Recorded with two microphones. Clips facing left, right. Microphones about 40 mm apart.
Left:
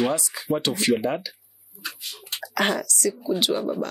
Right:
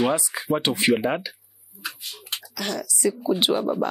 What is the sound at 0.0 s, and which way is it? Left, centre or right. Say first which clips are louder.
Speech: right 2 dB; right.